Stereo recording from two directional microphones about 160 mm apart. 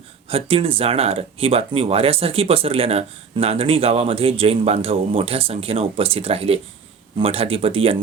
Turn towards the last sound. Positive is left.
turn(degrees=-35)  # may be behind; listen again after turning